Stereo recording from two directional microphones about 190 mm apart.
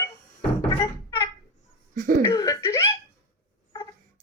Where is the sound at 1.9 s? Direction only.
45° right (ahead or behind).